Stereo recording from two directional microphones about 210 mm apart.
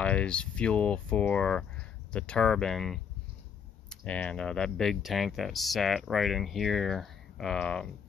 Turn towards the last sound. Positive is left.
turn(degrees=5)  # may be behind; listen again after turning